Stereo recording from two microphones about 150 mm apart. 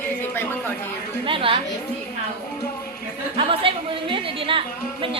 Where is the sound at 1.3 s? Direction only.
35° right (ahead or behind).